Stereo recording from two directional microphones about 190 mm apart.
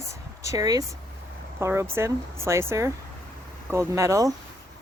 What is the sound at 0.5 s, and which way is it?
Speech, 20° right (ahead or behind).